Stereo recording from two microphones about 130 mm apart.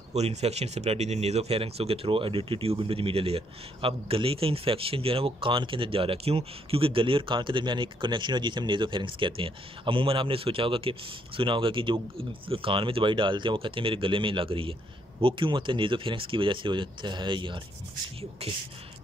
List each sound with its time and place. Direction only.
0.1 s speech: 55° right (ahead or behind); by 17.6 s 40° right (ahead or behind)
18.4 s speech: 50° right (ahead or behind)